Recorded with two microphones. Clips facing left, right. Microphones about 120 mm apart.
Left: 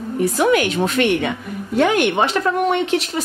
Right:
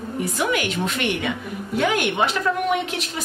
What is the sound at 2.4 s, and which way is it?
Speech, 50° left (ahead or behind).